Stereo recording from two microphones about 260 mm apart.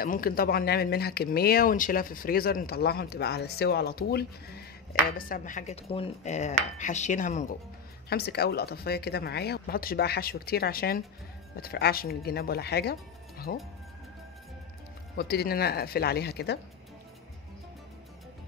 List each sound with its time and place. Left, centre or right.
0.0 s speech: left
15.1 s speech: left